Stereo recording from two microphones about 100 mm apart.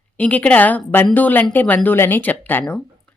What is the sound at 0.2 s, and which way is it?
Speech, 15° left (ahead or behind).